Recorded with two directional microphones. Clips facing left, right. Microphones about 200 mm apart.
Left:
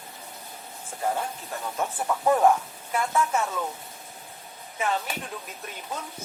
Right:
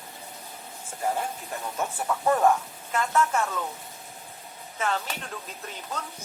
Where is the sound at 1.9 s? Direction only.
5° left (ahead or behind).